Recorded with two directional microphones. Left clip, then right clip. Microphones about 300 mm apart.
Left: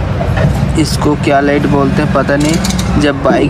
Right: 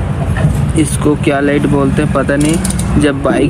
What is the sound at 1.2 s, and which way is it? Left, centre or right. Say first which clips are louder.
Speech: left 4 dB; centre.